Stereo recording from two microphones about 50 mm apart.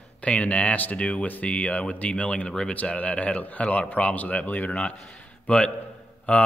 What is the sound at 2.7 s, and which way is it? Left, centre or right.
A man's voice, left.